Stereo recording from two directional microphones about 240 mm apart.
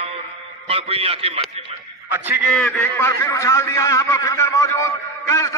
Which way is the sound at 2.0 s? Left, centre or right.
Centre.